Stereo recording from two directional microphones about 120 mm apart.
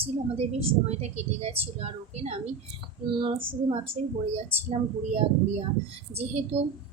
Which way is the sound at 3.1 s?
45° right (ahead or behind).